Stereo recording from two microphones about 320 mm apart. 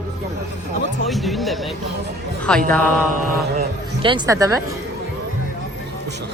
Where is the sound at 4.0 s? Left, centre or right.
Centre.